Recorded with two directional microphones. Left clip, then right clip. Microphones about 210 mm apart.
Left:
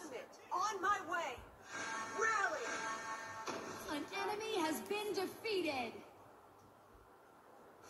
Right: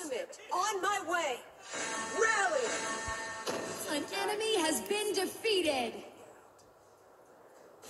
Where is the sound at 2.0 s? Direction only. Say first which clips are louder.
Right 7 dB; 40° right (ahead or behind).